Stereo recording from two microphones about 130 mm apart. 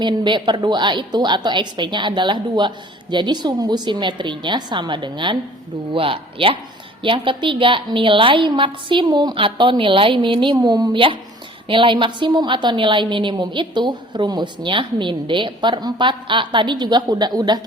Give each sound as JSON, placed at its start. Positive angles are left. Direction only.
{"t": 0.0, "sound": "a woman's voice", "side_deg": -35}